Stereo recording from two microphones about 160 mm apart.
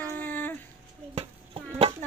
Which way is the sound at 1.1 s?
40° right (ahead or behind).